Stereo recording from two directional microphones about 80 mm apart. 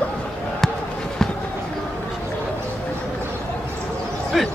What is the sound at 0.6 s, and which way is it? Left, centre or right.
Basketball bounce, centre.